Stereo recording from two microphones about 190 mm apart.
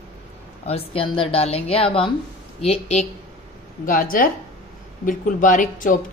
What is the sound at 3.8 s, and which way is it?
A woman's voice, 45° left (ahead or behind).